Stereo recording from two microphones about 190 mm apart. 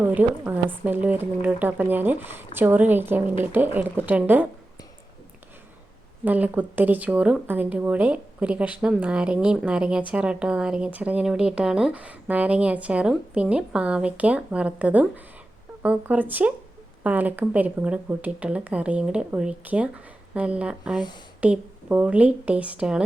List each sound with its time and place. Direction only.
0.0 s speech: 10° right (ahead or behind)
6.2 s speech: 10° right (ahead or behind)